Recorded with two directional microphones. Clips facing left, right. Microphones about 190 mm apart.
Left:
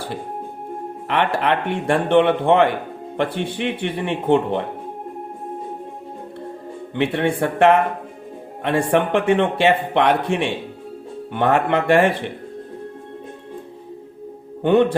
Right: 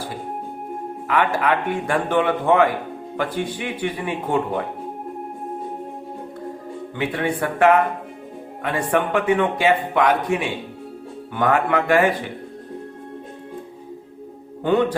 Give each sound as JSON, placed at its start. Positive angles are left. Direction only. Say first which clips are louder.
{"t": 1.1, "sound": "speech", "louder": "even", "side_deg": 30}
{"t": 3.5, "sound": "speech", "louder": "left 4 dB", "side_deg": 60}
{"t": 3.8, "sound": "speech", "louder": "left 5 dB", "side_deg": 25}
{"t": 7.0, "sound": "speech", "louder": "left 4 dB", "side_deg": 30}
{"t": 14.6, "sound": "speech", "louder": "left 3 dB", "side_deg": 25}